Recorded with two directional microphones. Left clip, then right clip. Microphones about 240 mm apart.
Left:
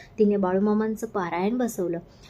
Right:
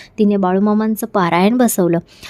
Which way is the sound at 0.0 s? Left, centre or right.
Right.